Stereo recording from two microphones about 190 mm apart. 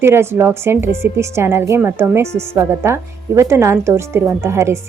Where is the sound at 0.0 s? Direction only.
15° right (ahead or behind).